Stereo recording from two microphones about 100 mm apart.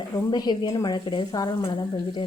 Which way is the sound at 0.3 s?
45° left (ahead or behind).